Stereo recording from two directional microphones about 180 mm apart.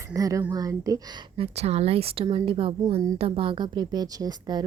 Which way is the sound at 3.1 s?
30° right (ahead or behind).